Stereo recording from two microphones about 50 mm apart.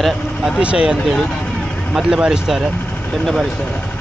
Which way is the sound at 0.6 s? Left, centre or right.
Right.